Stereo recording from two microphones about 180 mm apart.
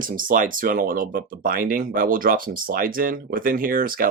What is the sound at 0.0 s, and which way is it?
Speech, 50° right (ahead or behind).